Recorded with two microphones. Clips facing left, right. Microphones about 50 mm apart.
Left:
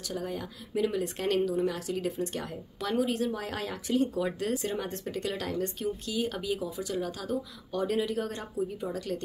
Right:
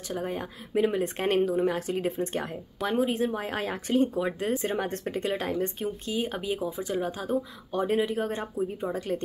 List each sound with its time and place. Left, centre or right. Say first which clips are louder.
0.0 s speech: right 3 dB; right
4.1 s speech: right 2 dB; right